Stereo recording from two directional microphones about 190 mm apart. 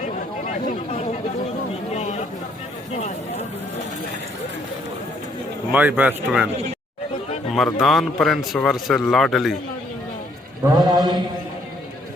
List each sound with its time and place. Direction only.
2.0 s a sound: 40° left (ahead or behind)
2.9 s speech: 35° left (ahead or behind)
5.7 s speech: 10° right (ahead or behind)
7.5 s a man's voice: centre (ahead or behind)
10.6 s a man's voice: 20° right (ahead or behind)